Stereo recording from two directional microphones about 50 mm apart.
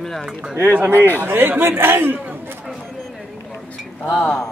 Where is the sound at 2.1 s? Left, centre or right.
Right.